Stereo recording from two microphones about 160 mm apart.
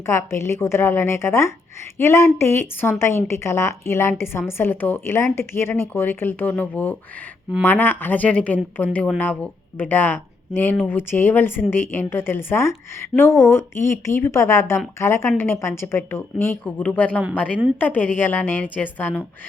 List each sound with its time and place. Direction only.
0.0 s speech: 15° left (ahead or behind)